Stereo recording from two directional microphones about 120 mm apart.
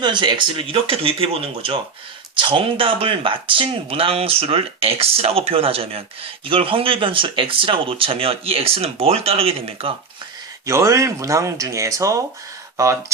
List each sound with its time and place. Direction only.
0.0 s speech: 40° right (ahead or behind)
10.7 s speech: 25° right (ahead or behind)